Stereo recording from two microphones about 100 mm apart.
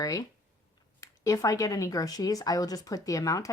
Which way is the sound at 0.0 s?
35° left (ahead or behind).